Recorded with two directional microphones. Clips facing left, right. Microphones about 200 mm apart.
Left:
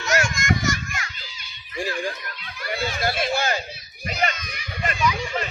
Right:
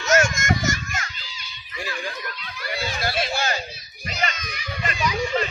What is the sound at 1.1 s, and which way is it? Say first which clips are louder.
Giggle: right 1 dB; 50° left (ahead or behind).